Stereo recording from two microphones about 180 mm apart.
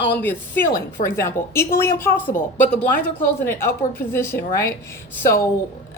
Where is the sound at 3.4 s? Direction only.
15° left (ahead or behind).